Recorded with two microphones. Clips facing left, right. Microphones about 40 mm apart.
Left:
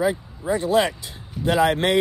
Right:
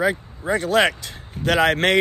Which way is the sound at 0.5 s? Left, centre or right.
Right.